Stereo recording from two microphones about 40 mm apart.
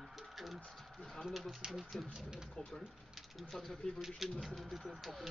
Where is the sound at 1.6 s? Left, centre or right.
Centre.